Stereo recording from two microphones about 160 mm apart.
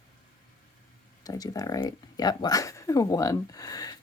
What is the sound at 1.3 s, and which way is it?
Speech, 20° left (ahead or behind).